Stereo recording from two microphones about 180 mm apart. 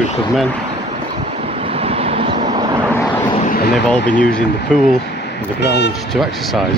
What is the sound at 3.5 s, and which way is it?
Vehicle, 55° left (ahead or behind).